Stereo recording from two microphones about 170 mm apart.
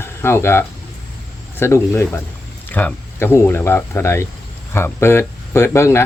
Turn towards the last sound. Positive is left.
turn(degrees=15)  # may be behind; listen again after turning